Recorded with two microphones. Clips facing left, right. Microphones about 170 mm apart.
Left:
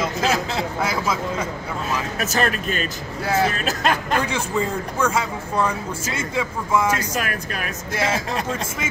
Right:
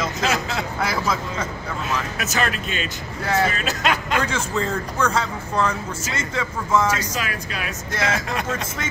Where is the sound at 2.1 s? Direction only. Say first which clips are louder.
Left 2 dB; 40° left (ahead or behind).